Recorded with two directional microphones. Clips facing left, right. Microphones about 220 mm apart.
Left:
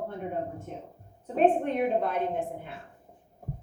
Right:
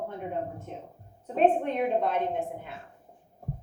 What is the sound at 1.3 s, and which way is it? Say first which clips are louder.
Speech: even; 50° left (ahead or behind).